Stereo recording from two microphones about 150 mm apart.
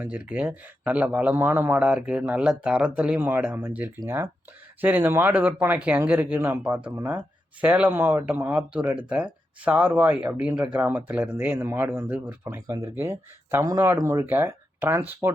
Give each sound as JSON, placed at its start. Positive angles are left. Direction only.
{"t": 0.0, "sound": "speech", "side_deg": -10}